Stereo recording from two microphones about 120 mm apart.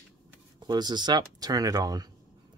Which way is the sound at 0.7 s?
35° right (ahead or behind).